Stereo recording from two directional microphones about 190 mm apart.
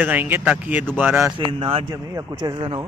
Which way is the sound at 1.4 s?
30° right (ahead or behind).